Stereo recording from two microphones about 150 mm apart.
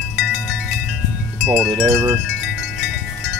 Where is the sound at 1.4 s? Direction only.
Centre (ahead or behind).